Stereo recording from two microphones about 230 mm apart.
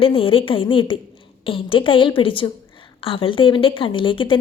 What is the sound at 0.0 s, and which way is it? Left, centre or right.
A woman's voice, left.